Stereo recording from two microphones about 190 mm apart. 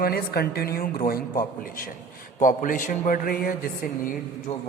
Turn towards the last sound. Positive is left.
turn(degrees=35)  # may be behind; listen again after turning